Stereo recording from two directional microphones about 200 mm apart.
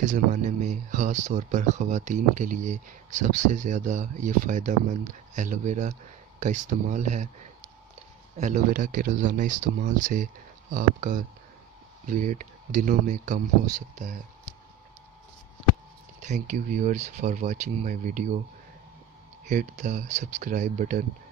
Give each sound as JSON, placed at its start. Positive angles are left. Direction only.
{"t": 0.0, "sound": "speech", "side_deg": -40}
{"t": 8.4, "sound": "speech", "side_deg": -40}
{"t": 16.2, "sound": "speech", "side_deg": -35}
{"t": 19.4, "sound": "speech", "side_deg": -35}